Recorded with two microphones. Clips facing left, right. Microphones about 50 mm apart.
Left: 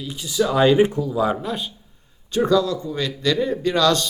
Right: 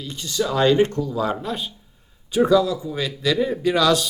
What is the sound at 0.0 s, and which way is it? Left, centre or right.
Speech, centre.